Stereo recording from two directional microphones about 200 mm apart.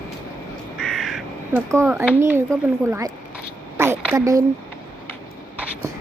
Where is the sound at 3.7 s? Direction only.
10° right (ahead or behind).